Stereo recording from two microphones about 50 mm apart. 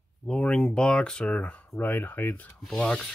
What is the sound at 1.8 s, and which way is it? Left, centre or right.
Speech, left.